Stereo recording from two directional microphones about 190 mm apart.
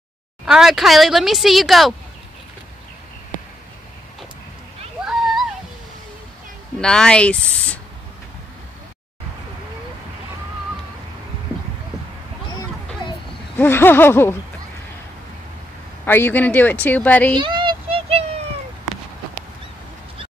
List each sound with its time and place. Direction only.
0.5 s speech: centre (ahead or behind)
6.8 s speech: 5° left (ahead or behind)
13.6 s speech: 10° left (ahead or behind)
16.1 s speech: 10° left (ahead or behind)
17.4 s a sound: 25° right (ahead or behind)